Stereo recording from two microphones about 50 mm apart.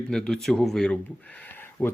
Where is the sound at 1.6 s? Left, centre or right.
Left.